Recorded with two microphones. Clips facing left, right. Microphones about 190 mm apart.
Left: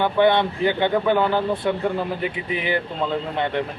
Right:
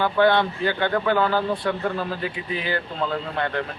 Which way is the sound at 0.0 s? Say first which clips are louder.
Left 1 dB; 20° left (ahead or behind).